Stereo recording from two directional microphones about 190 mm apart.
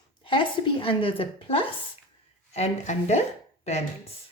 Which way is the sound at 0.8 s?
30° left (ahead or behind).